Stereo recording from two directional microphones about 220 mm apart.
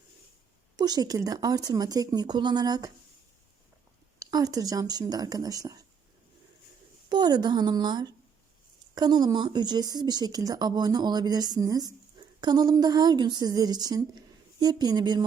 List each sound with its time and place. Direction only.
0.8 s speech: 15° right (ahead or behind)
4.2 s speech: 15° right (ahead or behind)
7.1 s speech: 20° right (ahead or behind)